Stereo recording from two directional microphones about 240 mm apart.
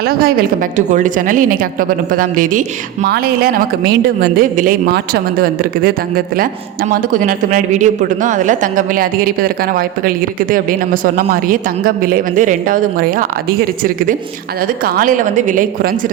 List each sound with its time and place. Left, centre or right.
0.0 s a woman's voice: right